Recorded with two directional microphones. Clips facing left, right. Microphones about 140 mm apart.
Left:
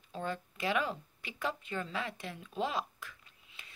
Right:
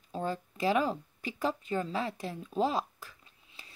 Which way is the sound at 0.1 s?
35° right (ahead or behind).